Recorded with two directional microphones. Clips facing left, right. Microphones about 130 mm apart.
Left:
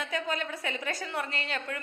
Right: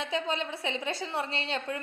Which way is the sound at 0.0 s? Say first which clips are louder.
Right 1 dB; 25° right (ahead or behind).